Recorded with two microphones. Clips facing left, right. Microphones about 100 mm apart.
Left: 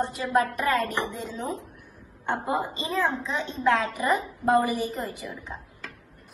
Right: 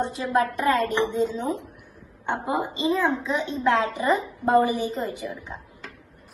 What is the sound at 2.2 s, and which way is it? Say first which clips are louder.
A woman's voice: right 1 dB; 20° right (ahead or behind).